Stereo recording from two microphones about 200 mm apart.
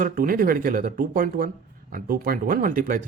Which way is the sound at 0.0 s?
45° right (ahead or behind).